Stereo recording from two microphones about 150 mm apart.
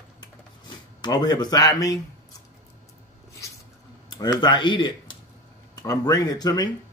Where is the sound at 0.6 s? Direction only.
30° left (ahead or behind).